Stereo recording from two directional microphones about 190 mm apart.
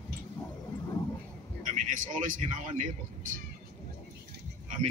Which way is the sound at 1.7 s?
40° right (ahead or behind).